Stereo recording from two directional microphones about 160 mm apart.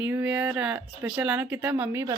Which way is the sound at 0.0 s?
10° right (ahead or behind).